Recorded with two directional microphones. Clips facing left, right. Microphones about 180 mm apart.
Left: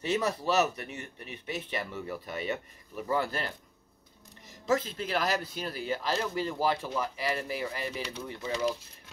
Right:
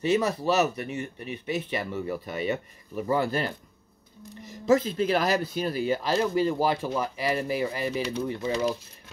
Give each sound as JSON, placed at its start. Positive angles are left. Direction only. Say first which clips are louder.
{"t": 0.0, "sound": "speech", "louder": "right 5 dB", "side_deg": -5}
{"t": 4.6, "sound": "speech", "louder": "right 7 dB", "side_deg": -10}